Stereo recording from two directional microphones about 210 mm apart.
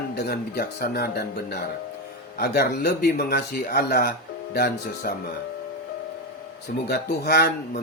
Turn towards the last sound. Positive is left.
turn(degrees=50)  # may be behind; listen again after turning